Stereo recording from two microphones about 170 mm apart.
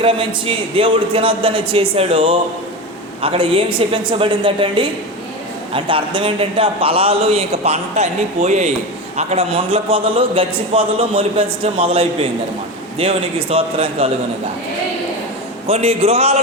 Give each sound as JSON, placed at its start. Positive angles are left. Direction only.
{"t": 0.0, "sound": "a man's voice", "side_deg": -30}
{"t": 15.6, "sound": "a man's voice", "side_deg": -35}